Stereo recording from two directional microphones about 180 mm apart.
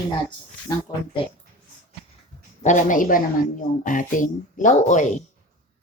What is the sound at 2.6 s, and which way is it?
Speech, 45° left (ahead or behind).